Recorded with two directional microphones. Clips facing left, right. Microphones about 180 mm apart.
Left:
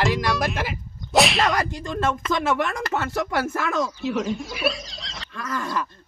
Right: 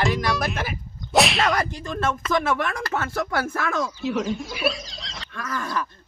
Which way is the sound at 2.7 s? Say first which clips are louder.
Left 1 dB; 20° left (ahead or behind).